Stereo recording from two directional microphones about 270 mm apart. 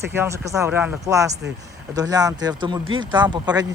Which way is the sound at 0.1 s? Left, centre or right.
Centre.